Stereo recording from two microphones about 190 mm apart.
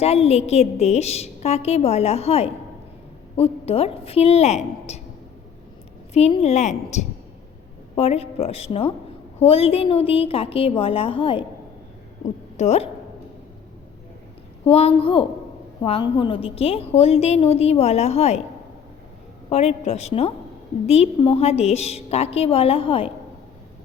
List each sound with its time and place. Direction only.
0.0 s a woman's voice: 35° left (ahead or behind)
6.1 s a woman's voice: 35° left (ahead or behind)
12.5 s a woman's voice: 35° left (ahead or behind)
14.7 s a woman's voice: 30° left (ahead or behind)
19.5 s a woman's voice: 30° left (ahead or behind)